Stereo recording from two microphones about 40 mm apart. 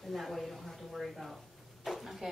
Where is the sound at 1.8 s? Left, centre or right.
Centre.